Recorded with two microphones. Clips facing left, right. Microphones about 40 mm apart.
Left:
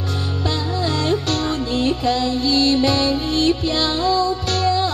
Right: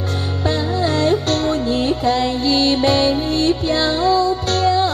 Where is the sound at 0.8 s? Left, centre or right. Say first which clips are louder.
Right 4 dB; right.